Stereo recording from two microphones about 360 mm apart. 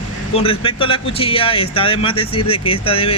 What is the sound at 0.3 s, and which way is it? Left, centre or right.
Speech, centre.